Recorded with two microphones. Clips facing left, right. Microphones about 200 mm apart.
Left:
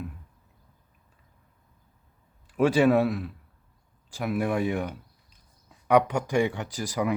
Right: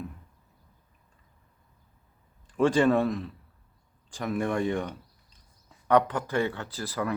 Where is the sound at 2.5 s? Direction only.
10° left (ahead or behind).